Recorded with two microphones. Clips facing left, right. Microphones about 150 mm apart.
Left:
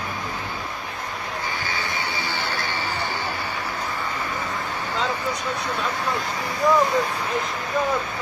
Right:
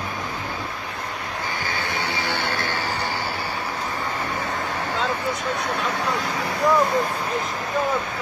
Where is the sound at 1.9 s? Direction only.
65° right (ahead or behind).